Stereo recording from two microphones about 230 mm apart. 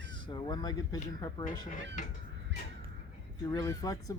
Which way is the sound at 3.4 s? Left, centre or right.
Centre.